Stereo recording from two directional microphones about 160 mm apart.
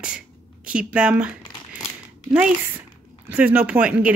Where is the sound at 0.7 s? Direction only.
5° right (ahead or behind).